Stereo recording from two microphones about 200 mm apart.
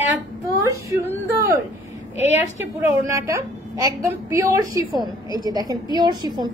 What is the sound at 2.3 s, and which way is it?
A woman's voice, 15° right (ahead or behind).